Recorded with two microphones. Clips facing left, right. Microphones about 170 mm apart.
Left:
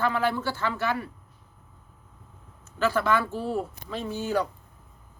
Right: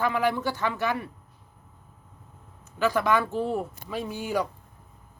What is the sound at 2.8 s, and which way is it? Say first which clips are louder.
Speech: right 1 dB; 15° right (ahead or behind).